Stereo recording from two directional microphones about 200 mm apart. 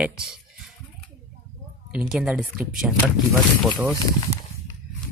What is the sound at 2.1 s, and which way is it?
Speech, centre (ahead or behind).